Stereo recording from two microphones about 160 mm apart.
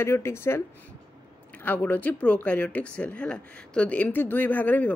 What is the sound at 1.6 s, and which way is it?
Speech, 10° left (ahead or behind).